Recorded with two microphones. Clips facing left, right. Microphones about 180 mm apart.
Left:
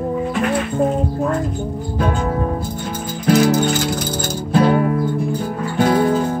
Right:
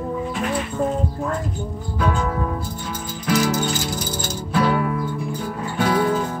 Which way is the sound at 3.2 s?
55° left (ahead or behind).